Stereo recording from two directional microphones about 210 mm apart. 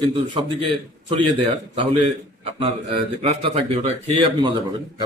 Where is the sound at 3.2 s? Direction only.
30° right (ahead or behind).